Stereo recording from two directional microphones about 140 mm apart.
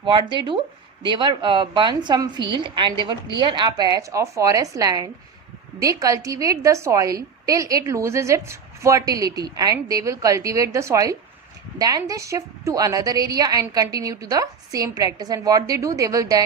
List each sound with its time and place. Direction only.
0.0 s a woman's voice: 35° right (ahead or behind)